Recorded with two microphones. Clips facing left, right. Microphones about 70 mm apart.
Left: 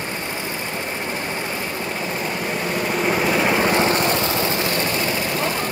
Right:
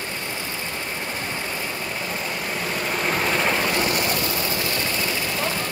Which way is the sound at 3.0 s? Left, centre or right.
Centre.